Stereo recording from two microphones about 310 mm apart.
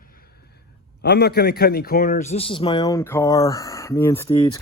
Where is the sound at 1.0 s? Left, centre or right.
Left.